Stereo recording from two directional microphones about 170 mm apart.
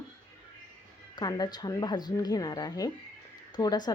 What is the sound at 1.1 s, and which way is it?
A woman's voice, 20° left (ahead or behind).